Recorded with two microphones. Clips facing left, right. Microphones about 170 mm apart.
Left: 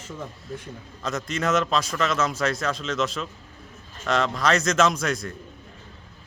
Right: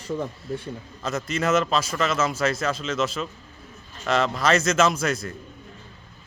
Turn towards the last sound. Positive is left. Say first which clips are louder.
# right 1 dB
turn(degrees=0)  # may be behind; listen again after turning